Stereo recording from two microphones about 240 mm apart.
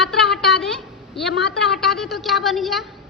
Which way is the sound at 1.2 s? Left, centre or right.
Centre.